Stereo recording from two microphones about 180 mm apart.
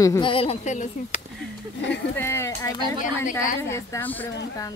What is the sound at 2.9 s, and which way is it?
Speech, 45° left (ahead or behind).